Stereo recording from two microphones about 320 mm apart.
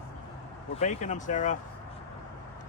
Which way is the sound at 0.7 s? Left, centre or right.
Left.